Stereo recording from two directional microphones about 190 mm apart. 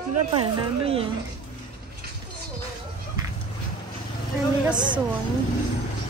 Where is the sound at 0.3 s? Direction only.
30° right (ahead or behind).